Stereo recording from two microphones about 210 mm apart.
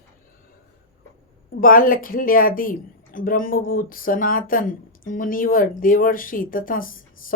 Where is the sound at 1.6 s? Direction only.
40° left (ahead or behind).